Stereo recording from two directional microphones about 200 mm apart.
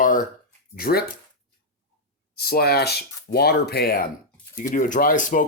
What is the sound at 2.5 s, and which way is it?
Speech, 50° left (ahead or behind).